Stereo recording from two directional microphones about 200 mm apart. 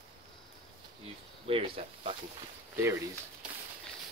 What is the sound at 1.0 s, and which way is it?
Speech, 30° right (ahead or behind).